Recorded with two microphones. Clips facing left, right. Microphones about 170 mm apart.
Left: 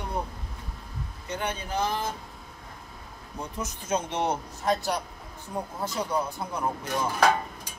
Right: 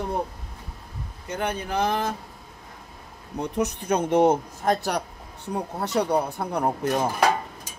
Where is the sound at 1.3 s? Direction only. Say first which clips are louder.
Right 4 dB; 60° right (ahead or behind).